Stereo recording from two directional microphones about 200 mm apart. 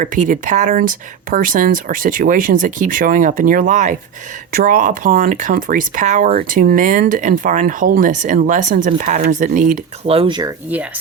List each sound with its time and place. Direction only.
0.0 s speech: 40° right (ahead or behind); by 10.5 s 25° right (ahead or behind)
10.7 s speech: 10° right (ahead or behind)